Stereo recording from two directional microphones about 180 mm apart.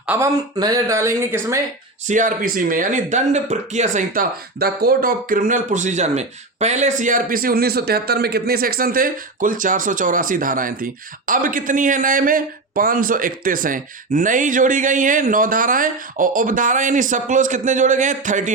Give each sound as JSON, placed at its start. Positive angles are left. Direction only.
{"t": 0.0, "sound": "speech", "side_deg": -10}
{"t": 0.6, "sound": "speech", "side_deg": -20}
{"t": 2.0, "sound": "speech", "side_deg": -45}